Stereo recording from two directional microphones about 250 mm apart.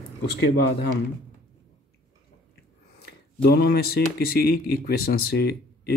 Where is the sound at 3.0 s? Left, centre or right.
Left.